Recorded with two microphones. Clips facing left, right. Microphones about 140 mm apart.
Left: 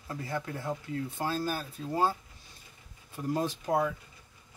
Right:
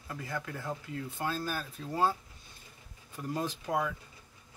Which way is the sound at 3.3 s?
35° left (ahead or behind).